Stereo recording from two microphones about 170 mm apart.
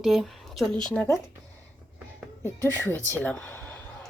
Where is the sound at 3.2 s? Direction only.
10° left (ahead or behind).